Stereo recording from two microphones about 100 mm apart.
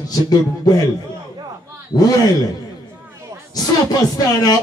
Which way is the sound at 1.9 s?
40° left (ahead or behind).